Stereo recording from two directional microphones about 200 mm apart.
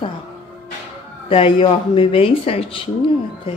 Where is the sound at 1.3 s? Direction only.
25° left (ahead or behind).